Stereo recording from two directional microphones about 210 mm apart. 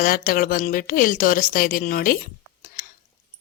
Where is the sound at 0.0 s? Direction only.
40° left (ahead or behind).